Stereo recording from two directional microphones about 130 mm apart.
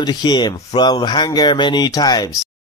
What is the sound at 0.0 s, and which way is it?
Speech, 35° left (ahead or behind).